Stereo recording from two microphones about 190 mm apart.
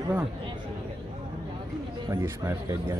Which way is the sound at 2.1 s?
15° right (ahead or behind).